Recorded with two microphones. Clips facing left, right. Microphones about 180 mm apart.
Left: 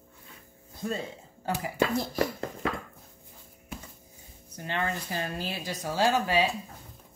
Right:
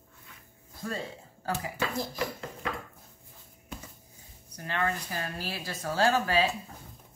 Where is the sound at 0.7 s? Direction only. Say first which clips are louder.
Left 3 dB; 20° left (ahead or behind).